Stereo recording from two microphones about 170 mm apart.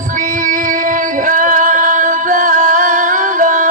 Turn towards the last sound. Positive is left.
turn(degrees=-50)  # may be behind; listen again after turning